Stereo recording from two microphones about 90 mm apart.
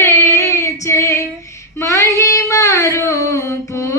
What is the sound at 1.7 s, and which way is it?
Female singing, 35° left (ahead or behind).